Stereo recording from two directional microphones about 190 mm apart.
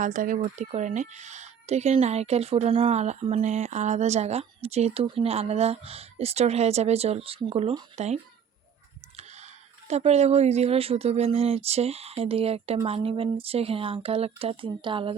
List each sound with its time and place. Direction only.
0.0 s speech: 45° right (ahead or behind); by 15.1 s 25° right (ahead or behind)